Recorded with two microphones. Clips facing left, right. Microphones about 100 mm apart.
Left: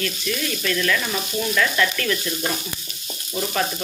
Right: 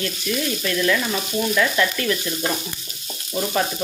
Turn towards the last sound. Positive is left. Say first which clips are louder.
# right 2 dB
turn(degrees=-10)  # may be behind; listen again after turning